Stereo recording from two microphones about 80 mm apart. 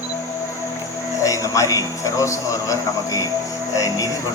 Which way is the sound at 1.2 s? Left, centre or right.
Left.